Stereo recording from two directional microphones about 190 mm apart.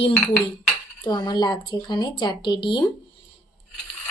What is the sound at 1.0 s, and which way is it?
A woman's voice, 20° left (ahead or behind).